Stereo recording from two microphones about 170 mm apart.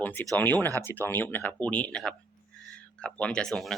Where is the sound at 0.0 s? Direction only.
10° left (ahead or behind).